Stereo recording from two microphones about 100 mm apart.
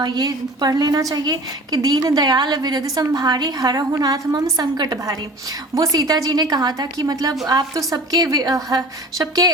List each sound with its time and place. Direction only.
0.0 s a woman's voice: 45° right (ahead or behind)